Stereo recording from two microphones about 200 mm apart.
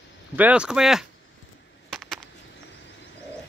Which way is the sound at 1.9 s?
Centre (ahead or behind).